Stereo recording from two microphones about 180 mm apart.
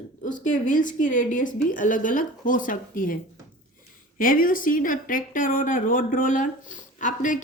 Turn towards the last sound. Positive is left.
turn(degrees=45)  # may be behind; listen again after turning